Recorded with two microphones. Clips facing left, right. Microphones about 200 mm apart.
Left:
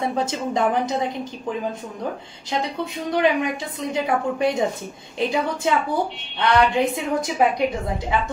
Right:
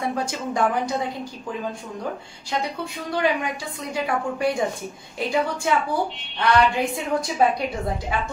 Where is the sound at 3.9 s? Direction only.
20° left (ahead or behind).